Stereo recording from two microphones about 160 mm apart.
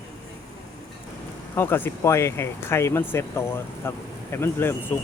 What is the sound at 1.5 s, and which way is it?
Speech, 15° left (ahead or behind).